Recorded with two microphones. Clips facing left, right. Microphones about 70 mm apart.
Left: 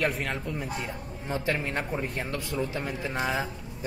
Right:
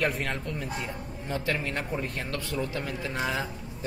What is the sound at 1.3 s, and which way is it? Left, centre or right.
A man's voice, left.